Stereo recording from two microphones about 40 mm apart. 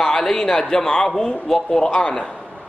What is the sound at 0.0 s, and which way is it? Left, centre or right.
A man's voice, centre.